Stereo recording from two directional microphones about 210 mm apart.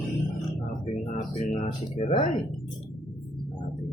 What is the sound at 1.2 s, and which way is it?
Speech, 40° left (ahead or behind).